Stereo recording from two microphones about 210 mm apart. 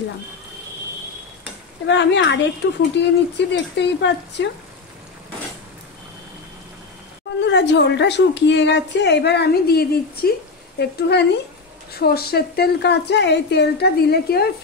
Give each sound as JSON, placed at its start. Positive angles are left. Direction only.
{"t": 1.9, "sound": "a woman's voice", "side_deg": 55}
{"t": 7.4, "sound": "a woman's voice", "side_deg": 55}